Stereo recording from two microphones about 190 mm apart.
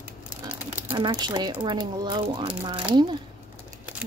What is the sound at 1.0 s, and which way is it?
Speech, 25° right (ahead or behind).